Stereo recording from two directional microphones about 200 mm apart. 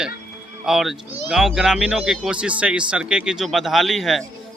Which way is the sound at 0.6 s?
Centre (ahead or behind).